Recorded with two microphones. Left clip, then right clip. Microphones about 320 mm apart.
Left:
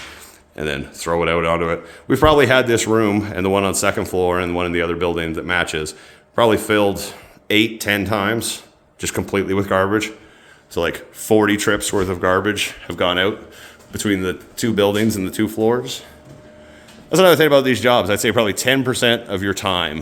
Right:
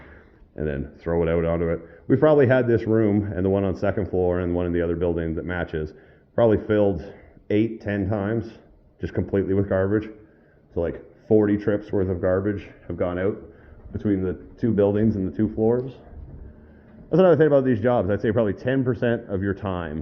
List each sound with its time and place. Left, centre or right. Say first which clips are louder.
0.5 s speech: left 5 dB; centre
4.0 s speech: left 4 dB; left
4.3 s speech: left 5 dB; centre
8.4 s speech: left 7 dB; left
9.0 s speech: left 4 dB; centre
15.0 s speech: left 4 dB; left
15.6 s speech: left 4 dB; centre
17.1 s speech: left 5 dB; centre